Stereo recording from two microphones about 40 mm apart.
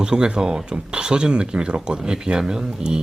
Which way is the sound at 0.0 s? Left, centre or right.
Right.